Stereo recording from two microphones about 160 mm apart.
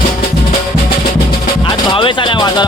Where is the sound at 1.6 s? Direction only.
30° left (ahead or behind).